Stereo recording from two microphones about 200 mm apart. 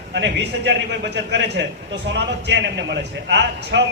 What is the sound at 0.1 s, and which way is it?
A man's voice, 60° right (ahead or behind).